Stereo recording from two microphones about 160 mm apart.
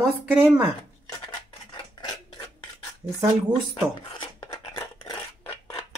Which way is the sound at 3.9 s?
25° left (ahead or behind).